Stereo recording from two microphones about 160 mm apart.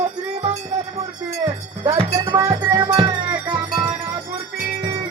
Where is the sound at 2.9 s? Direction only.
30° right (ahead or behind).